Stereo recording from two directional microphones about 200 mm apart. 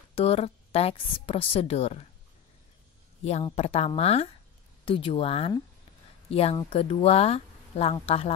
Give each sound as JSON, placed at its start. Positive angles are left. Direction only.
{"t": 0.1, "sound": "a woman's voice", "side_deg": 30}
{"t": 3.3, "sound": "speech", "side_deg": 30}